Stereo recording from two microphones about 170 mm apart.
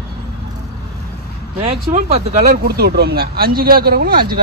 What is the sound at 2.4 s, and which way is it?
Speech, 65° right (ahead or behind).